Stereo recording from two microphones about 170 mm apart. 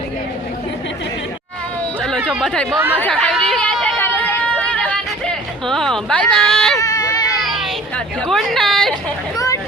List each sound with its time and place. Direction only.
2.0 s a sound: 5° left (ahead or behind)
2.4 s speech: 5° left (ahead or behind)
2.6 s speech: 15° right (ahead or behind)
3.0 s chatter: 5° left (ahead or behind)
6.7 s a sound: 20° left (ahead or behind)
7.4 s speech: centre (ahead or behind)